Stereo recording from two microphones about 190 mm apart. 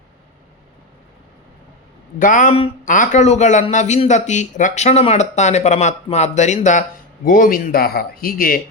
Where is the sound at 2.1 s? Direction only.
45° left (ahead or behind).